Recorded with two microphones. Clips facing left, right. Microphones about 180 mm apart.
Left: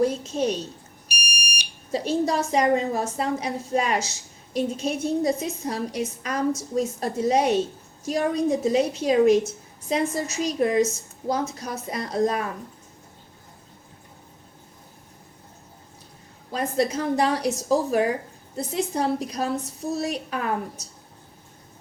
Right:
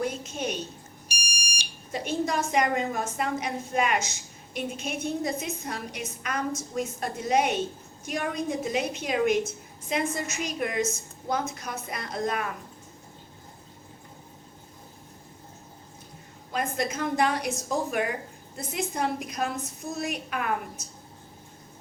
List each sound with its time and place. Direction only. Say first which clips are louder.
0.0 s a woman's voice: left 8 dB; 35° left (ahead or behind)
1.1 s smoke detector: left 5 dB; 90° right
1.9 s a woman's voice: left 5 dB; 35° left (ahead or behind)
16.5 s a woman's voice: left 5 dB; 35° left (ahead or behind)